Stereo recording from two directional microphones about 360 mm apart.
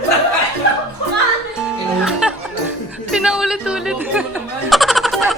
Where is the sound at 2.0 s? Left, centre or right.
Centre.